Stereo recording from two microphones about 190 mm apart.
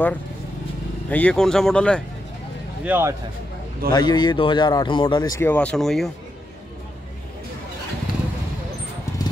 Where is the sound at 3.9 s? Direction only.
20° left (ahead or behind); by 6.1 s centre (ahead or behind).